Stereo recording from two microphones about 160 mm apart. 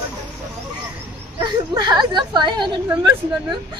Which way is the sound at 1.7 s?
25° right (ahead or behind).